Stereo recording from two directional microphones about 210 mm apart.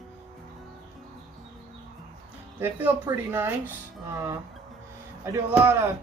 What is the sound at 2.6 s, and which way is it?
Speech, 10° right (ahead or behind).